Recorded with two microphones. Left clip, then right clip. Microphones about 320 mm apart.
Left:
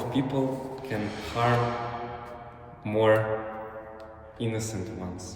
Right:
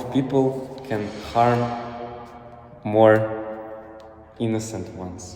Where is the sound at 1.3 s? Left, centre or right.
Centre.